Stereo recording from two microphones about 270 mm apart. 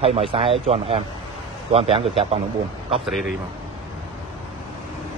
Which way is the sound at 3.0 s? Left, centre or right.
Centre.